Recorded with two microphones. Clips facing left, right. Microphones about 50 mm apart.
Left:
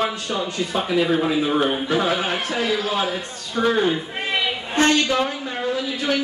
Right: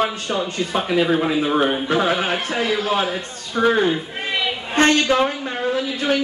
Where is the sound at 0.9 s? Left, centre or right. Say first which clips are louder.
Right 1 dB; centre.